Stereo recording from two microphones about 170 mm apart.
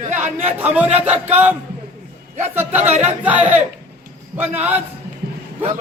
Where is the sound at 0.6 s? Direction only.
10° right (ahead or behind).